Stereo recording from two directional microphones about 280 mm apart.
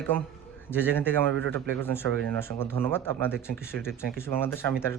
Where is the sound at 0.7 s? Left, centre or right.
Centre.